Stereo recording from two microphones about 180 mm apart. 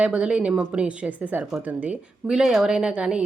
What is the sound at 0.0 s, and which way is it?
Speech, 5° right (ahead or behind).